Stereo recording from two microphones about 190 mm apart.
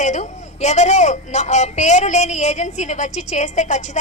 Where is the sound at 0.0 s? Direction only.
40° left (ahead or behind).